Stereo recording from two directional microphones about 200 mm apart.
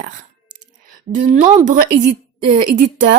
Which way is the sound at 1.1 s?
40° right (ahead or behind).